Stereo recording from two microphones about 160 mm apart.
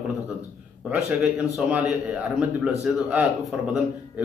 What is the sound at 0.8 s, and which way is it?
A man's voice, 10° right (ahead or behind).